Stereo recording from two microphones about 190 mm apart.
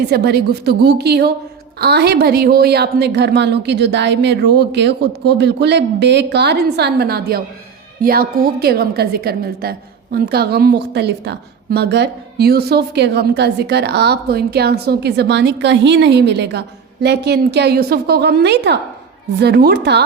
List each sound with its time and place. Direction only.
0.1 s a woman's voice: 60° right (ahead or behind)